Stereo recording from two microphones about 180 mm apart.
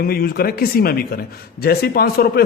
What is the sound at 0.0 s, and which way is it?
A man's voice, 55° left (ahead or behind).